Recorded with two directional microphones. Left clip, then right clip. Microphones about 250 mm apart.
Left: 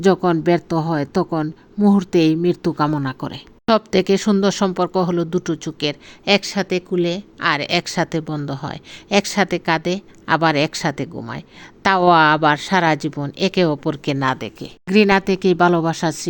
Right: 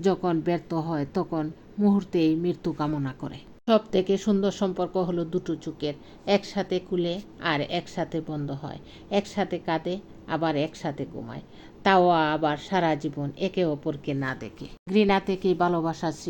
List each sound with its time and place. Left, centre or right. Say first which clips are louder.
0.0 s speech: left 9 dB; left
3.7 s speech: left 6 dB; left